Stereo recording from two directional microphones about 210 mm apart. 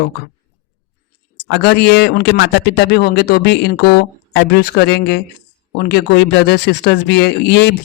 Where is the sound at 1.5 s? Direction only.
50° left (ahead or behind).